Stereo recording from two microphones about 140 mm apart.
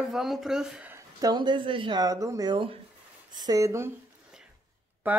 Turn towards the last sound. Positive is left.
turn(degrees=-10)  # may be behind; listen again after turning